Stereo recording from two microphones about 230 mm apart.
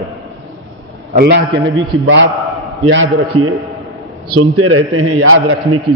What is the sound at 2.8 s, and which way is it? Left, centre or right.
A man's voice, right.